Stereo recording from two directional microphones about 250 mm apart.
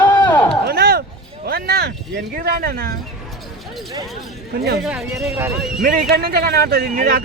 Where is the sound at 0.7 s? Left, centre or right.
Right.